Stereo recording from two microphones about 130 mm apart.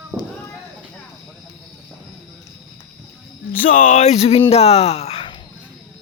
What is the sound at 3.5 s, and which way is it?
Speech, 90° left.